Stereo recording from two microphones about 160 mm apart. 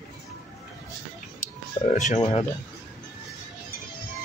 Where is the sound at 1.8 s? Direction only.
35° left (ahead or behind).